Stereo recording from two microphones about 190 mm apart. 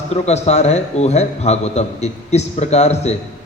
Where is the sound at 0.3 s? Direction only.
35° left (ahead or behind).